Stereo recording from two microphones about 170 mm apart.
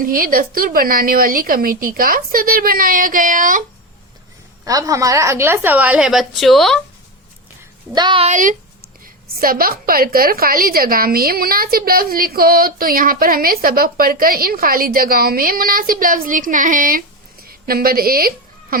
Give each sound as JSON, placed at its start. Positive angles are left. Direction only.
{"t": 0.0, "sound": "a woman's voice", "side_deg": -60}
{"t": 4.6, "sound": "a woman's voice", "side_deg": -20}
{"t": 7.9, "sound": "speech", "side_deg": -30}
{"t": 8.3, "sound": "a woman's voice", "side_deg": -50}
{"t": 17.4, "sound": "a sound", "side_deg": -60}